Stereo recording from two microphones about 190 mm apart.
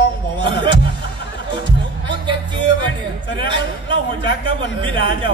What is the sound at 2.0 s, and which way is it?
A man's voice, 25° right (ahead or behind).